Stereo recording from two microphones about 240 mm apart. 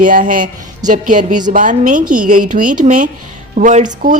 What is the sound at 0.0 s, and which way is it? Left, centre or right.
A woman's voice, right.